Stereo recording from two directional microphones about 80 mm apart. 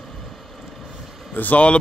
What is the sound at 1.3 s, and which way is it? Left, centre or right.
Speech, centre.